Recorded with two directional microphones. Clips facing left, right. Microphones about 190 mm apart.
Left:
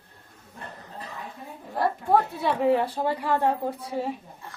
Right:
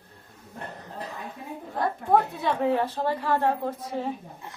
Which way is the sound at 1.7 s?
5° left (ahead or behind).